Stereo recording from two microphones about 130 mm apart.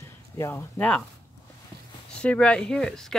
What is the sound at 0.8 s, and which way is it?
Speech, 10° left (ahead or behind).